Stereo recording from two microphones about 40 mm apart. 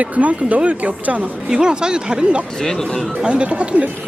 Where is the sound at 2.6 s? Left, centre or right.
Centre.